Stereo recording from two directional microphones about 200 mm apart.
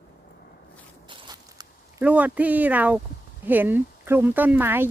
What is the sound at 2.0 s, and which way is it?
A child's voice, 10° right (ahead or behind).